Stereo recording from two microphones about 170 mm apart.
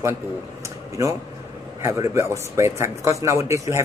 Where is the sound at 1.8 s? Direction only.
15° right (ahead or behind).